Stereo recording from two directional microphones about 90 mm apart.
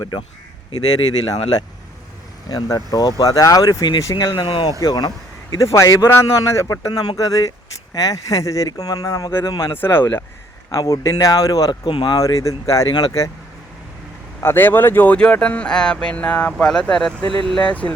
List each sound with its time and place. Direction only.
2.5 s speech: 45° left (ahead or behind); by 4.7 s 75° left (ahead or behind)
4.8 s speech: 50° left (ahead or behind)
5.5 s speech: 35° left (ahead or behind)
9.7 s speech: 25° left (ahead or behind)
10.7 s speech: 40° left (ahead or behind)
11.7 s speech: 60° left (ahead or behind)
12.1 s speech: 40° left (ahead or behind)
12.9 s speech: 55° left (ahead or behind)
14.4 s speech: 25° left (ahead or behind); by 17.2 s 5° left (ahead or behind)
17.2 s speech: 75° right (ahead or behind)
17.6 s speech: 15° left (ahead or behind)